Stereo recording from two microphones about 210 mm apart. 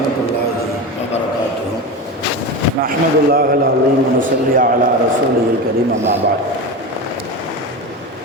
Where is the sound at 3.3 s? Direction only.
45° right (ahead or behind).